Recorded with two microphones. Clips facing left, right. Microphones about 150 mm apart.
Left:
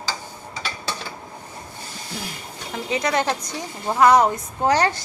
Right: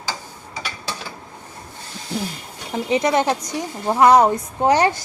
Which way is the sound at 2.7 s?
25° right (ahead or behind).